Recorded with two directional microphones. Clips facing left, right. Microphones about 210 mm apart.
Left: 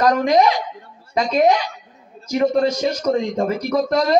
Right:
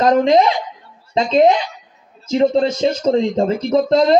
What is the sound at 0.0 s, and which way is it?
A man's voice, 25° right (ahead or behind).